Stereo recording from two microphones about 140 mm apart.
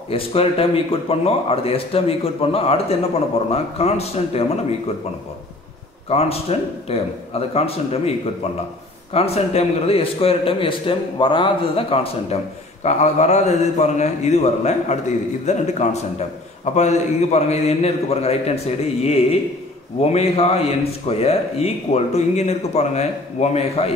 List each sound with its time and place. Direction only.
0.1 s a man's voice: 45° left (ahead or behind)
6.0 s a man's voice: 45° left (ahead or behind)
9.1 s a man's voice: 45° left (ahead or behind)
12.8 s a man's voice: 55° left (ahead or behind)